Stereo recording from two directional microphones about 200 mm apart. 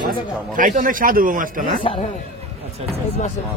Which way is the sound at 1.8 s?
25° left (ahead or behind).